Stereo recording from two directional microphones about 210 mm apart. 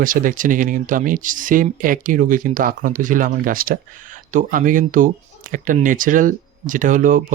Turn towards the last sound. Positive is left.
turn(degrees=-40)  # may be behind; listen again after turning